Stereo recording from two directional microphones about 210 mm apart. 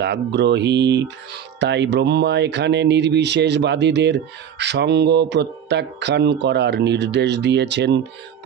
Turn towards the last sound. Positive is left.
turn(degrees=-55)  # may be behind; listen again after turning